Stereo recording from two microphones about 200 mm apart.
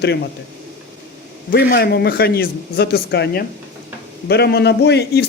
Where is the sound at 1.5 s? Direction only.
50° left (ahead or behind).